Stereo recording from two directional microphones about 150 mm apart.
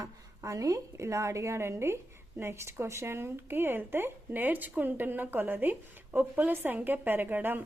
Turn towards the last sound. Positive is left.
turn(degrees=-15)  # may be behind; listen again after turning